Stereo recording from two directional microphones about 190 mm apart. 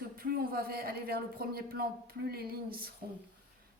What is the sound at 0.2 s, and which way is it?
Speech, 50° right (ahead or behind).